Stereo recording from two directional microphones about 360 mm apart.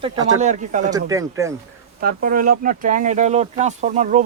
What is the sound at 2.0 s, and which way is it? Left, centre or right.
Speech, right.